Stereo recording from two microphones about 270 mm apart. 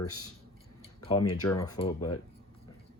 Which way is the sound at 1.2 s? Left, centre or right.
Left.